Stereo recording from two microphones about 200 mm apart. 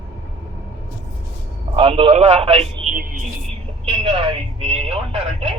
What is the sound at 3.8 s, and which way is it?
Speech, 25° right (ahead or behind).